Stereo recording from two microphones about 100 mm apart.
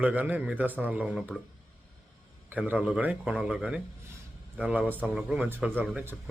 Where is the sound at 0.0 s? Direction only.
15° right (ahead or behind).